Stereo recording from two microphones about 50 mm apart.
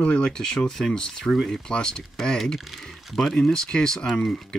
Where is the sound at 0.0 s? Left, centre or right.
Centre.